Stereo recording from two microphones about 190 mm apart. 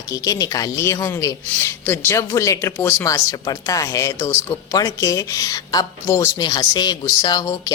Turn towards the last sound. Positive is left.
turn(degrees=20)  # may be behind; listen again after turning